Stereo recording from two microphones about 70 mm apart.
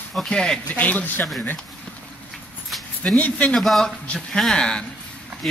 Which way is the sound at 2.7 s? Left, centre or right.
Centre.